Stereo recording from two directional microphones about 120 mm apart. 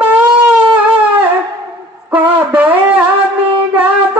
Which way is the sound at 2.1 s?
15° right (ahead or behind).